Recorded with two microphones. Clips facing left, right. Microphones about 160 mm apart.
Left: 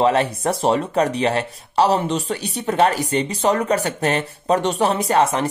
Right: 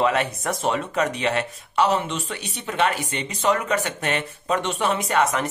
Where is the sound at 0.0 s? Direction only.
30° left (ahead or behind).